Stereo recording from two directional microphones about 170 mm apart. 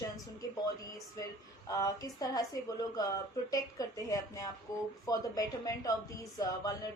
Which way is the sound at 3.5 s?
20° left (ahead or behind).